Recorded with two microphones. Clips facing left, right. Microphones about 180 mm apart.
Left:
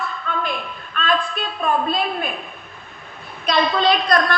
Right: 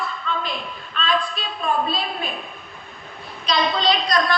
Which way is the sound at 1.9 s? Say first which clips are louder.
Left 4 dB; 55° left (ahead or behind).